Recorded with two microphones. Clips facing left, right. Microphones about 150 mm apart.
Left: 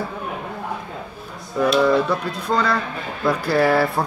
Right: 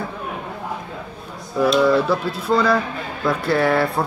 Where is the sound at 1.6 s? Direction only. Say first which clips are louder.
Right 1 dB; 5° right (ahead or behind).